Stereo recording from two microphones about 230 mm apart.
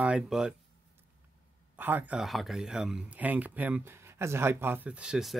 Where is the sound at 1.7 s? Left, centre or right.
Centre.